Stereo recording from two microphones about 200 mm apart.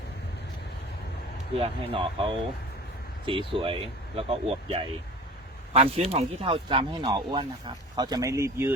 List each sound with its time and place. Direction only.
1.5 s speech: 30° right (ahead or behind); by 8.7 s 15° right (ahead or behind)